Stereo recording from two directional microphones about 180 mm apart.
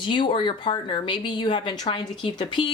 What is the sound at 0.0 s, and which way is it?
Speech, 25° left (ahead or behind).